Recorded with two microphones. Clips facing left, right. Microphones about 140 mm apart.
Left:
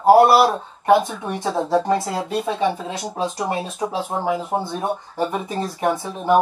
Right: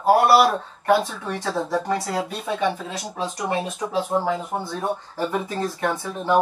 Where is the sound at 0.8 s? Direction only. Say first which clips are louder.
Left 4 dB; 20° left (ahead or behind).